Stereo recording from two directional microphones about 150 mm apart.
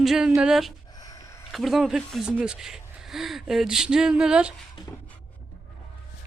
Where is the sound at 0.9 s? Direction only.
25° left (ahead or behind).